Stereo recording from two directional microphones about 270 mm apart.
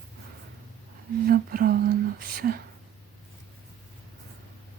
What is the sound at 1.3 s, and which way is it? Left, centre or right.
Speech, right.